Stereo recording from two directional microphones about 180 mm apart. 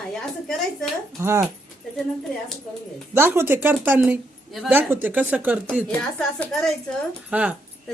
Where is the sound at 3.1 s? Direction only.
10° right (ahead or behind).